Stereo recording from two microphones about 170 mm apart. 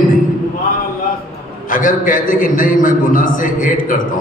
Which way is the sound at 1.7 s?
50° left (ahead or behind).